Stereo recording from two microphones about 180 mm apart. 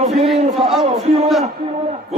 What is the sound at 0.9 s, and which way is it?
Speech, 35° right (ahead or behind).